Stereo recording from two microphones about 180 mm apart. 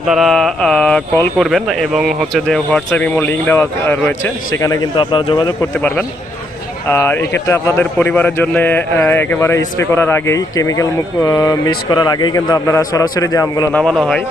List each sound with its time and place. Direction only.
0.1 s a man's voice: centre (ahead or behind); by 5.5 s 25° left (ahead or behind)
5.7 s a man's voice: 10° left (ahead or behind)
13.7 s speech: 5° left (ahead or behind)